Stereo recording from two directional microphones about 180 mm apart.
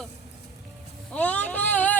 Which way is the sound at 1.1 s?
10° left (ahead or behind).